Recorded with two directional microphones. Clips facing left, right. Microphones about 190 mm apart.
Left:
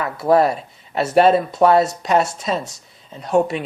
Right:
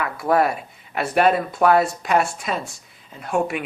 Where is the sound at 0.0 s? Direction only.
30° left (ahead or behind).